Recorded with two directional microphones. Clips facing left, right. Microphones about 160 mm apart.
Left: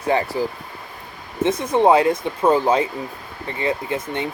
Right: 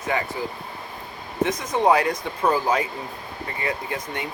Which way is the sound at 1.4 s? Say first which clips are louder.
Left 4 dB; 25° left (ahead or behind).